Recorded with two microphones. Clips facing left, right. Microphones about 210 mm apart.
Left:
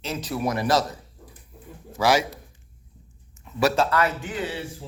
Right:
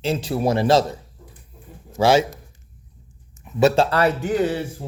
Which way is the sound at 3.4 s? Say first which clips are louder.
Right 5 dB; 25° right (ahead or behind).